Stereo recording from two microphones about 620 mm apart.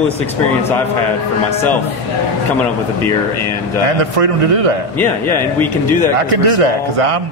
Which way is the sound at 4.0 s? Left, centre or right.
Right.